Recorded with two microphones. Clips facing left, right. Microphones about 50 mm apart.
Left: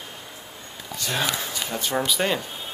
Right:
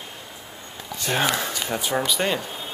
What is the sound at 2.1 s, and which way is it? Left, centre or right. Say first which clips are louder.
Speech: even; centre.